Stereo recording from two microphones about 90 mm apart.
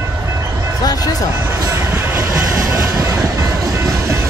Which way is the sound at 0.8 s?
45° left (ahead or behind).